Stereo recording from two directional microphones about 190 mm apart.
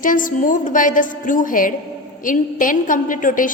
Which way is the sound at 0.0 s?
45° left (ahead or behind).